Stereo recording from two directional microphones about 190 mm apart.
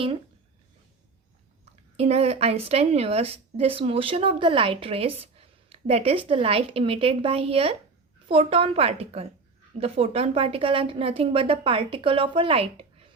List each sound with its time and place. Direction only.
2.0 s a woman's voice: 35° right (ahead or behind)